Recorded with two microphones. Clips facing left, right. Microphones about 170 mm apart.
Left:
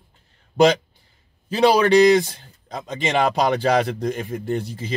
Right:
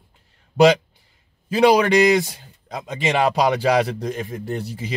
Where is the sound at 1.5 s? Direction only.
10° right (ahead or behind).